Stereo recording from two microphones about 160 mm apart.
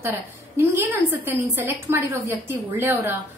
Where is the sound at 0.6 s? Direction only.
15° right (ahead or behind).